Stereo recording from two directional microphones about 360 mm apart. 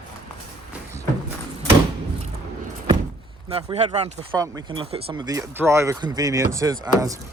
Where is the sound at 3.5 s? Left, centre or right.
Centre.